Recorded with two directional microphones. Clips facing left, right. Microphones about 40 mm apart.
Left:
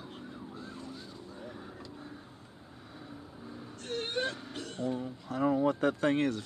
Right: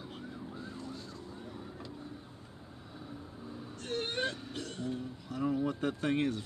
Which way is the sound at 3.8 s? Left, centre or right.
Centre.